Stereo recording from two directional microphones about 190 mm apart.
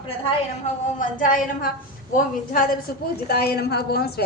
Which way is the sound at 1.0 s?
45° left (ahead or behind).